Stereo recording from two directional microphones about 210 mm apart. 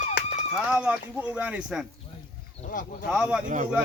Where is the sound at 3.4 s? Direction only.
40° right (ahead or behind).